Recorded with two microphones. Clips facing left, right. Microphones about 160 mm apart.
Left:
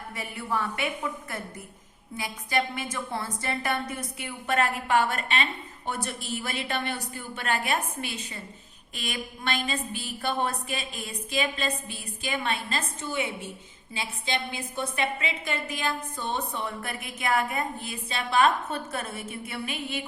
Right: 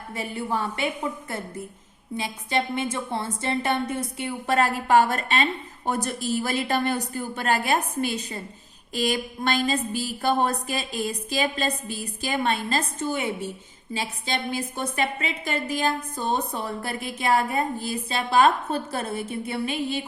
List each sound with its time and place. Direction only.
0.1 s a woman's voice: 30° right (ahead or behind)